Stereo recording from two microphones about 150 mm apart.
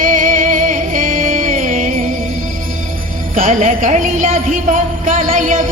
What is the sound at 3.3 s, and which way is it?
Jingle bell, 60° right (ahead or behind).